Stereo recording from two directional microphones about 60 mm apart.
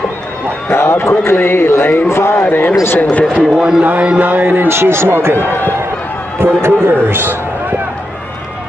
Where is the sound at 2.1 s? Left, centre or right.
Left.